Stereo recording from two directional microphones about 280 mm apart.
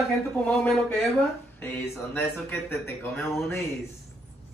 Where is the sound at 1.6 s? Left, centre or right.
Centre.